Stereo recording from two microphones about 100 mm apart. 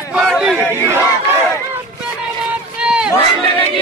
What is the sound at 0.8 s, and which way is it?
Battle cry, 25° right (ahead or behind).